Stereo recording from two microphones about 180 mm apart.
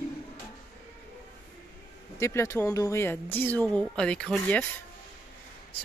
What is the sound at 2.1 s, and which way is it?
A woman's voice, 15° left (ahead or behind).